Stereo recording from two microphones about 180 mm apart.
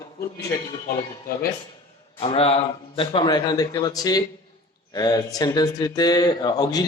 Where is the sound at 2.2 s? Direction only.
35° left (ahead or behind).